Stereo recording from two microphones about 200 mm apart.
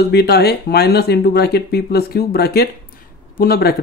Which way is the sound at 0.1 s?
55° left (ahead or behind).